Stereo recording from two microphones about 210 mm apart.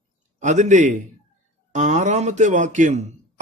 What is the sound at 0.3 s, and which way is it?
A man's voice, 35° right (ahead or behind).